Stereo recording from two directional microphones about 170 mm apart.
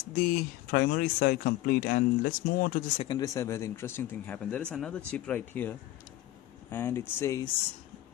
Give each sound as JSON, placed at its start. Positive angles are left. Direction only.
{"t": 0.2, "sound": "speech", "side_deg": 55}
{"t": 3.0, "sound": "speech", "side_deg": 25}